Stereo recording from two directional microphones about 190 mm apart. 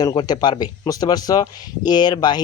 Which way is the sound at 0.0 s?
20° left (ahead or behind).